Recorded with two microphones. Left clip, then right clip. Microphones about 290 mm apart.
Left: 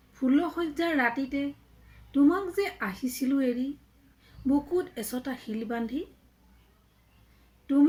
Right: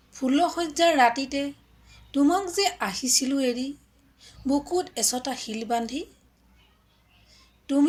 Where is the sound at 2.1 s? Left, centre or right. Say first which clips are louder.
Right 2 dB; right.